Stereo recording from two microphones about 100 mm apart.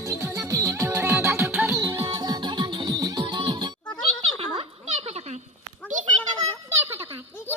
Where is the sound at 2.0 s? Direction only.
35° right (ahead or behind); by 3.7 s 50° right (ahead or behind).